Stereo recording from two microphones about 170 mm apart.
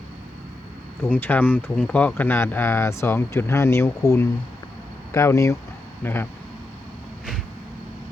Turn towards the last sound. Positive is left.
turn(degrees=15)  # may be behind; listen again after turning